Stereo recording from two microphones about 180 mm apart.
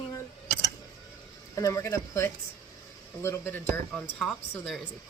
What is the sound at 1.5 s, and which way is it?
A woman's voice, 15° left (ahead or behind).